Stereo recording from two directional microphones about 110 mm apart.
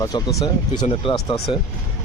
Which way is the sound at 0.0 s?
30° left (ahead or behind).